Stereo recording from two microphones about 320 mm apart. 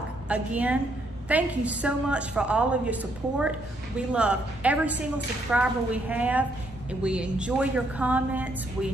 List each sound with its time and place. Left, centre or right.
0.3 s a woman's voice: centre